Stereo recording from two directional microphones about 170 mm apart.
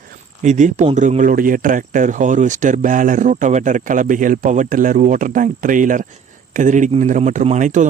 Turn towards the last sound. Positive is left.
turn(degrees=-45)  # may be behind; listen again after turning